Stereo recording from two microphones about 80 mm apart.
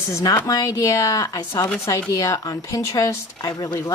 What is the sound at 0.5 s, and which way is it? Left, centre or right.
Speech, left.